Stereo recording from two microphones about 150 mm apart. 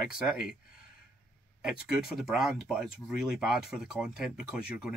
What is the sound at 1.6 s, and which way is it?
Speech, 5° right (ahead or behind).